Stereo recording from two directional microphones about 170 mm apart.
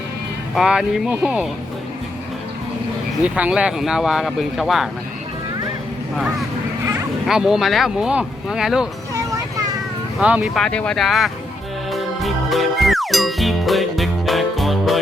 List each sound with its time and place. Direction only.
0.5 s speech: 5° right (ahead or behind)
3.2 s speech: 10° right (ahead or behind)
7.3 s speech: centre (ahead or behind)
9.1 s music: 20° right (ahead or behind)
10.2 s speech: 5° right (ahead or behind)
11.9 s music: centre (ahead or behind)